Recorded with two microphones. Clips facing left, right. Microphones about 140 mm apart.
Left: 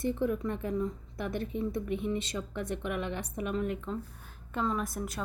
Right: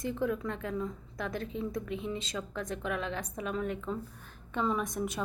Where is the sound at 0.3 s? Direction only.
90° right.